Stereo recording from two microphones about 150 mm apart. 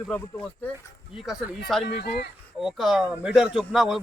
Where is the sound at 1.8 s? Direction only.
90° left.